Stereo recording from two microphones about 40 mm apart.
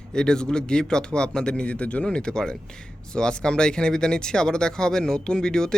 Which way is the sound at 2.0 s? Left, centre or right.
Centre.